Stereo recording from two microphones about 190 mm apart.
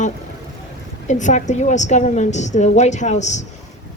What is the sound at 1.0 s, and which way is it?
Speech, 40° left (ahead or behind).